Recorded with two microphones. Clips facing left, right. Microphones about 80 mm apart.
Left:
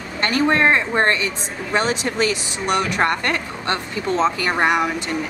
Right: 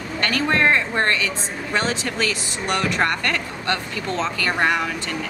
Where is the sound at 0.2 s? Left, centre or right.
Left.